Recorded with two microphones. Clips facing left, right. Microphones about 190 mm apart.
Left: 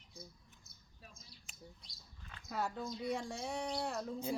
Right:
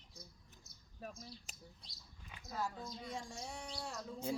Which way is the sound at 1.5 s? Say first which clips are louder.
Even; 40° right (ahead or behind).